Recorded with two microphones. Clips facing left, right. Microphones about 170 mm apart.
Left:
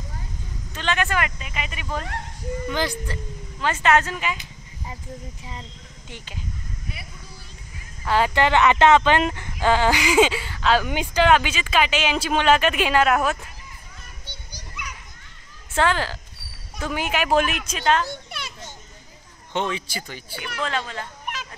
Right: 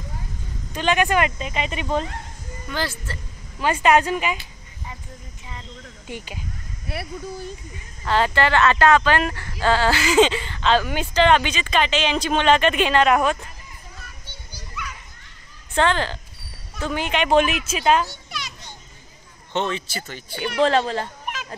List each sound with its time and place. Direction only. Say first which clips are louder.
0.7 s speech: right 5 dB; 15° right (ahead or behind)
2.7 s speech: even; 15° left (ahead or behind)
3.6 s speech: right 3 dB; 15° right (ahead or behind)
6.0 s speech: right 5 dB; 10° right (ahead or behind)
8.0 s speech: even; 10° left (ahead or behind)
15.7 s a woman's voice: right 1 dB; 5° left (ahead or behind)
18.3 s children playing: right 1 dB; 55° left (ahead or behind)
19.5 s speech: right 1 dB; 10° left (ahead or behind)
20.6 s speech: right 9 dB; 35° right (ahead or behind)